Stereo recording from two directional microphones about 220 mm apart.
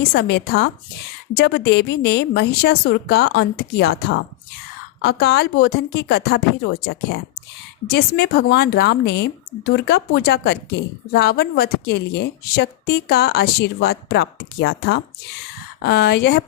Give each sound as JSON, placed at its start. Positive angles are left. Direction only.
{"t": 0.0, "sound": "a woman's voice", "side_deg": 45}
{"t": 5.2, "sound": "a woman's voice", "side_deg": 45}